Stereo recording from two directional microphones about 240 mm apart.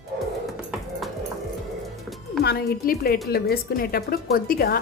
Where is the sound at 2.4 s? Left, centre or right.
Left.